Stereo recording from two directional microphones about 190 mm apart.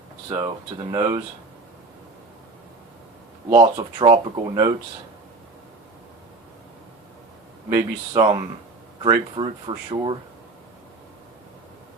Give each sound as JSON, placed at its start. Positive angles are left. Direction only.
{"t": 0.3, "sound": "speech", "side_deg": -25}
{"t": 3.5, "sound": "speech", "side_deg": -20}
{"t": 7.7, "sound": "speech", "side_deg": -15}
{"t": 9.3, "sound": "speech", "side_deg": -25}